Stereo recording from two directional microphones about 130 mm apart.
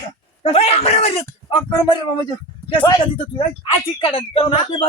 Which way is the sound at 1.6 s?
30° left (ahead or behind).